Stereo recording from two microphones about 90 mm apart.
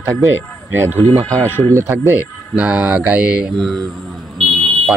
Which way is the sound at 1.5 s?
25° left (ahead or behind).